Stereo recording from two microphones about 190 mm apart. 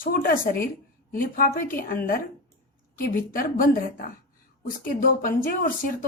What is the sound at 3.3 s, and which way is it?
Speech, 50° left (ahead or behind).